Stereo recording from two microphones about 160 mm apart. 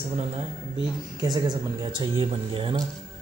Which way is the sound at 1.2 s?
25° right (ahead or behind).